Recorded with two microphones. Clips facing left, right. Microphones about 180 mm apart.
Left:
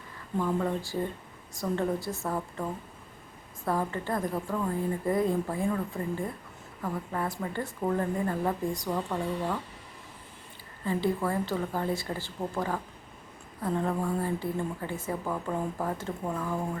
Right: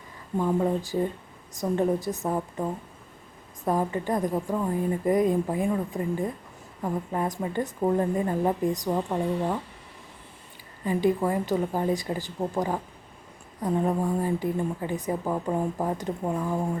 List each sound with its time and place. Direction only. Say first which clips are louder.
0.3 s a woman's voice: right 4 dB; 20° right (ahead or behind)
10.8 s a woman's voice: right 4 dB; 15° right (ahead or behind)